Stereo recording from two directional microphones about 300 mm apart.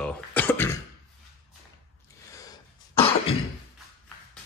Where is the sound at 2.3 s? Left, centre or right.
Centre.